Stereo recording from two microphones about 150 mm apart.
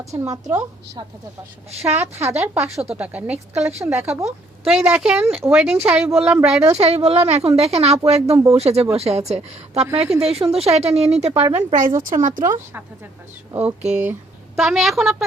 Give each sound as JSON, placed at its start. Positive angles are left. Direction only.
{"t": 0.0, "sound": "a woman's voice", "side_deg": -20}
{"t": 1.8, "sound": "speech", "side_deg": -15}
{"t": 4.6, "sound": "a woman's voice", "side_deg": -5}
{"t": 5.5, "sound": "speech", "side_deg": -5}
{"t": 6.7, "sound": "a woman's voice", "side_deg": -40}
{"t": 11.5, "sound": "speech", "side_deg": -55}
{"t": 13.5, "sound": "a woman's voice", "side_deg": -10}